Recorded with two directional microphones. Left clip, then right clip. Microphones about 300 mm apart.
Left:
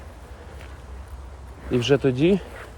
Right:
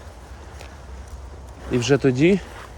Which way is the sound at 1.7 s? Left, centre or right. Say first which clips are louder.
Right 1 dB; centre.